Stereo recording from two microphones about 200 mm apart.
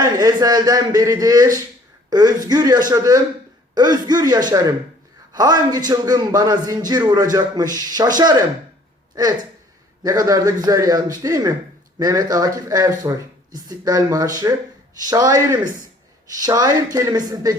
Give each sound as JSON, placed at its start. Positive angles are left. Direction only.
{"t": 0.0, "sound": "a man's voice", "side_deg": -20}
{"t": 10.0, "sound": "a man's voice", "side_deg": -20}